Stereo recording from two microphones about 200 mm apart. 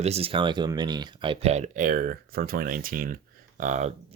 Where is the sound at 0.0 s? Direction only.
30° right (ahead or behind).